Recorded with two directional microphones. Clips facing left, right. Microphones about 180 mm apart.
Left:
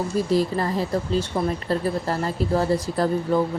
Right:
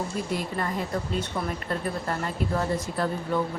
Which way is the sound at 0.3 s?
35° left (ahead or behind).